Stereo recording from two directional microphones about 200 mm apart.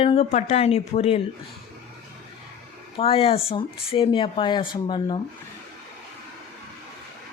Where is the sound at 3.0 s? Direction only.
30° left (ahead or behind).